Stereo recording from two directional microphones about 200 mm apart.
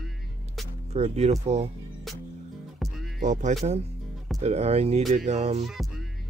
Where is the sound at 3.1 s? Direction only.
40° right (ahead or behind).